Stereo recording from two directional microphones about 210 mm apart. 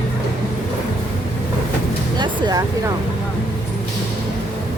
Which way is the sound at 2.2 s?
20° right (ahead or behind).